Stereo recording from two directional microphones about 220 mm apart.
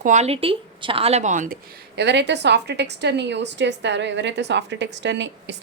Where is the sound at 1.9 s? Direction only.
50° right (ahead or behind).